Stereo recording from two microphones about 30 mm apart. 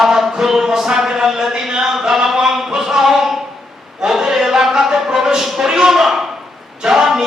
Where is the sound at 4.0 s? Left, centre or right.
Right.